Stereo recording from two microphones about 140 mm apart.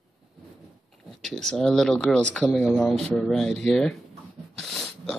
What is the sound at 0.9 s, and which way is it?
Speech, centre (ahead or behind).